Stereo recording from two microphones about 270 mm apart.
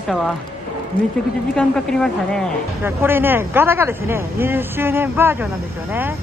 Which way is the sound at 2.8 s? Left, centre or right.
Centre.